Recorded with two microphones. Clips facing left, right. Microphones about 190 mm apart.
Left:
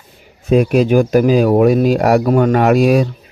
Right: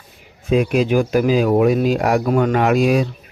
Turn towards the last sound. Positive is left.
turn(degrees=45)  # may be behind; listen again after turning